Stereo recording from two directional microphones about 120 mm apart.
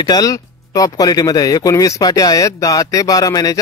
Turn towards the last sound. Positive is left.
turn(degrees=30)  # may be behind; listen again after turning